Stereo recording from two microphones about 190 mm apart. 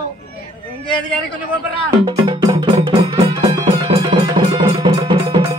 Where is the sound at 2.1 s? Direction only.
20° right (ahead or behind).